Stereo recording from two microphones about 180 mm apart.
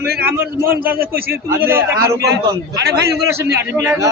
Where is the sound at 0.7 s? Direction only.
55° right (ahead or behind).